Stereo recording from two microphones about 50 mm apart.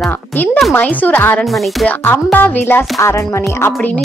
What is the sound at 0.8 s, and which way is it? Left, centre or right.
A woman's voice, left.